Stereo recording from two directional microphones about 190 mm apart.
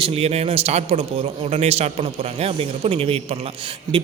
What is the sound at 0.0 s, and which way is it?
A man's voice, 30° right (ahead or behind).